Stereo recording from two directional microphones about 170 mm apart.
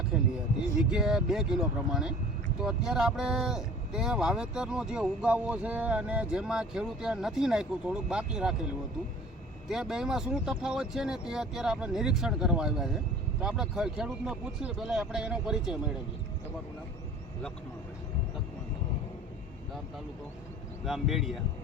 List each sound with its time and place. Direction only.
0.8 s speech: 5° right (ahead or behind)
9.6 s speech: 5° right (ahead or behind)
20.8 s speech: centre (ahead or behind)